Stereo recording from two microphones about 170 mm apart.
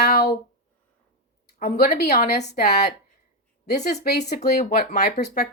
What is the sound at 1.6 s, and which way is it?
Speech, 60° left (ahead or behind).